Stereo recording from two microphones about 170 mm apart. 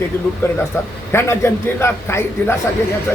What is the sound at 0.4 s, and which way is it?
A man's voice, 15° left (ahead or behind).